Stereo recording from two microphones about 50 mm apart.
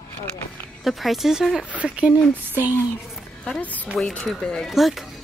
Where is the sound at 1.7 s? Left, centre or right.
Right.